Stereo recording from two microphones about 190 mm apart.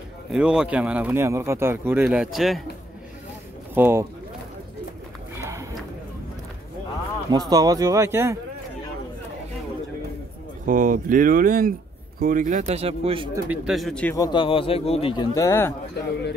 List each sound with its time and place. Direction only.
0.3 s speech: 5° right (ahead or behind)
2.0 s speech: centre (ahead or behind)
3.7 s speech: 10° right (ahead or behind)
5.3 s a sound: 15° right (ahead or behind)
7.2 s speech: 20° right (ahead or behind)
10.6 s speech: 45° right (ahead or behind)
13.3 s speech: 5° right (ahead or behind)
14.1 s speech: 20° left (ahead or behind)
15.3 s speech: 15° left (ahead or behind)